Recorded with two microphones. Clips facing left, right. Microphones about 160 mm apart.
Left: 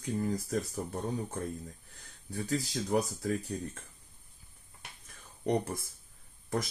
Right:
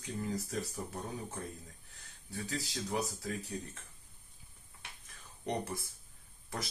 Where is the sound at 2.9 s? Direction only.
45° left (ahead or behind).